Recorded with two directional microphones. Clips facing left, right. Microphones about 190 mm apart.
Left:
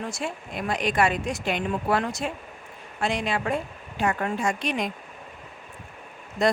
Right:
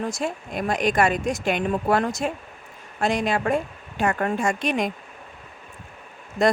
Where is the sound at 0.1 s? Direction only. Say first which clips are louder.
Right 4 dB; 40° right (ahead or behind).